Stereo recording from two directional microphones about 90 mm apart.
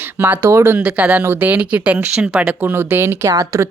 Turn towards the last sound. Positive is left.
turn(degrees=-35)  # may be behind; listen again after turning